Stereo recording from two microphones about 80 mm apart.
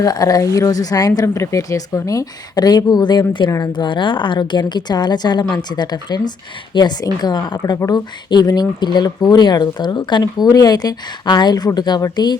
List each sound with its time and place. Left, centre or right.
0.0 s speech: left
1.2 s a woman's voice: left
7.8 s speech: left
8.3 s a woman's voice: left
10.5 s a woman's voice: left